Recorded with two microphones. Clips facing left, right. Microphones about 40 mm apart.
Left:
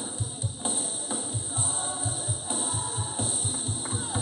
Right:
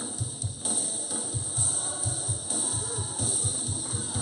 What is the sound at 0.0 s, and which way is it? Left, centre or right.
Music, left.